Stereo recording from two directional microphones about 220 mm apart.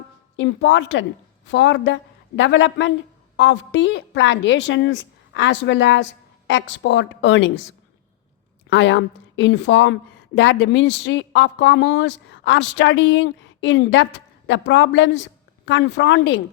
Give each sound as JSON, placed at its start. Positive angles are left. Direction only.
{"t": 0.3, "sound": "a woman's voice", "side_deg": 55}
{"t": 8.7, "sound": "a woman's voice", "side_deg": 55}